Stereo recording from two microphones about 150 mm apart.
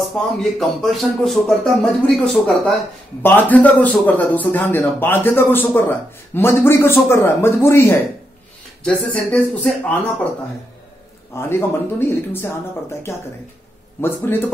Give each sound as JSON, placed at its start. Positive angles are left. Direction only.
{"t": 0.2, "sound": "a man's voice", "side_deg": 0}
{"t": 8.8, "sound": "speech", "side_deg": 5}
{"t": 11.3, "sound": "a man's voice", "side_deg": 15}
{"t": 14.0, "sound": "a man's voice", "side_deg": 15}